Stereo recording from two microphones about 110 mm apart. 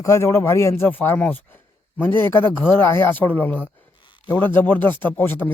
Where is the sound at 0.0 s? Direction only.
25° left (ahead or behind).